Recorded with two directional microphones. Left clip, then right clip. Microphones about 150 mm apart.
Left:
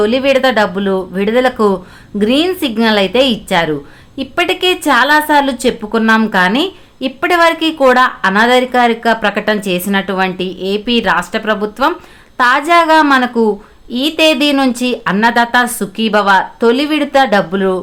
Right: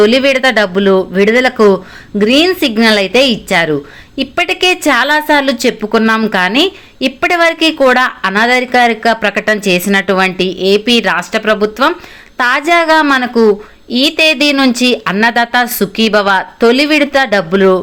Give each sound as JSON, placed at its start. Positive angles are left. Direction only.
{"t": 0.0, "sound": "a woman's voice", "side_deg": -15}